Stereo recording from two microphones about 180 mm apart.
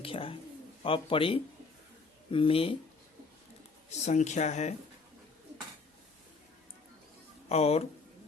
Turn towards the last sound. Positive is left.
turn(degrees=35)  # may be behind; listen again after turning